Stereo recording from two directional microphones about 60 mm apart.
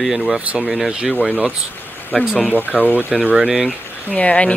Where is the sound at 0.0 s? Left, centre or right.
Centre.